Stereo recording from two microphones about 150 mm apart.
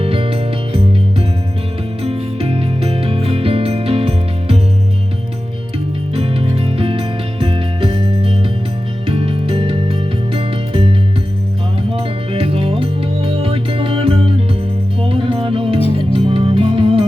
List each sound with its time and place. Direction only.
0.0 s music: 40° right (ahead or behind)
2.0 s music: 40° right (ahead or behind)
6.1 s music: 40° right (ahead or behind)
11.9 s music: 40° right (ahead or behind)